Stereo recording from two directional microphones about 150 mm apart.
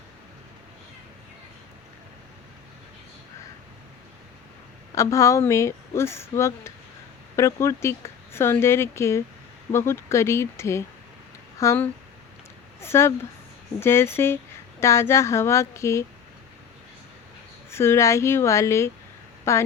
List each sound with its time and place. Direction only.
4.9 s speech: 20° left (ahead or behind)
17.7 s speech: 15° left (ahead or behind)